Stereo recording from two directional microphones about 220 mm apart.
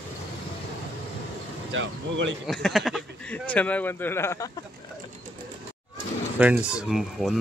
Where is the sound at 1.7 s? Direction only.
55° right (ahead or behind).